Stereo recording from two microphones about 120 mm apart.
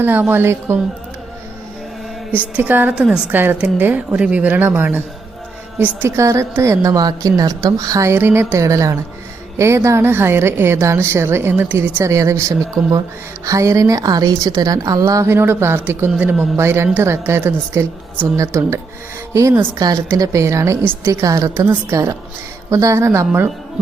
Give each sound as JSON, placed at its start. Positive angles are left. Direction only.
{"t": 0.0, "sound": "speech", "side_deg": -15}
{"t": 2.6, "sound": "a woman's voice", "side_deg": -15}